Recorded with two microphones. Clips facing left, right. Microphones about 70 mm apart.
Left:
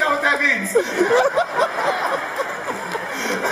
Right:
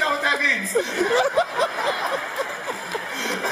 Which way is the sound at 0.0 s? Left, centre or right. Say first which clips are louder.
Left 3 dB; centre.